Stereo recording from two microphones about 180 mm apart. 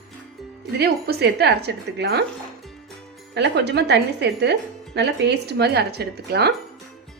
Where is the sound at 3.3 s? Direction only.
70° right (ahead or behind).